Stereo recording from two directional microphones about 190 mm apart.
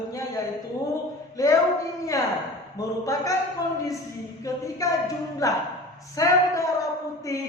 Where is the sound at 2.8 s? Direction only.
15° left (ahead or behind).